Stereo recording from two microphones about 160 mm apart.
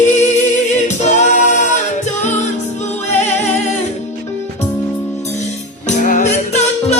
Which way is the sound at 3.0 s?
45° left (ahead or behind).